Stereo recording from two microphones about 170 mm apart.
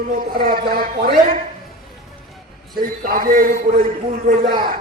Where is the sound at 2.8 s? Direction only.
55° right (ahead or behind).